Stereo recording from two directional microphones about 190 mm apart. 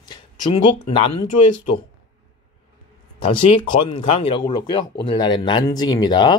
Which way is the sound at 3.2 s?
25° left (ahead or behind).